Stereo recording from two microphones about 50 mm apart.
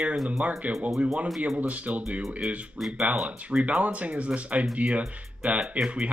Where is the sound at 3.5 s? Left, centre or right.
Right.